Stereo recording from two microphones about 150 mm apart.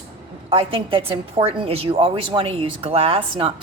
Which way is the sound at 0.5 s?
35° right (ahead or behind).